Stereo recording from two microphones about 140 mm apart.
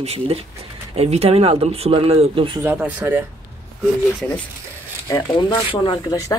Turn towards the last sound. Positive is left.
turn(degrees=30)  # may be behind; listen again after turning